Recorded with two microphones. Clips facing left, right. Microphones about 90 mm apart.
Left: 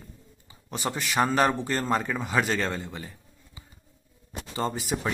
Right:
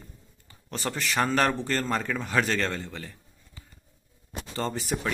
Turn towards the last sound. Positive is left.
turn(degrees=5)  # may be behind; listen again after turning